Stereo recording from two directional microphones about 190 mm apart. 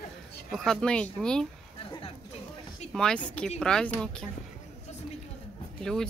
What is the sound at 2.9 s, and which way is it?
Speech, 5° left (ahead or behind).